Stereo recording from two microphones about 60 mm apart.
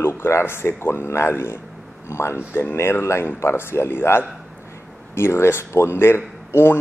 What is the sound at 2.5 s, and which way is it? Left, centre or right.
A man's voice, left.